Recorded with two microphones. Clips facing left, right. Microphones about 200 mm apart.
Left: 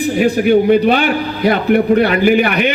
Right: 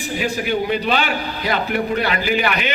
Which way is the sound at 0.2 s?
55° left (ahead or behind).